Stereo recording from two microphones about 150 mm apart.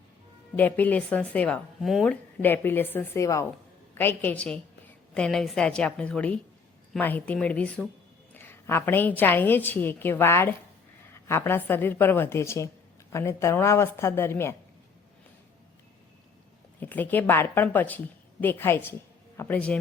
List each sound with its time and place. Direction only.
0.5 s a woman's voice: 10° left (ahead or behind)
2.4 s a woman's voice: 15° left (ahead or behind)
16.8 s a woman's voice: 10° left (ahead or behind)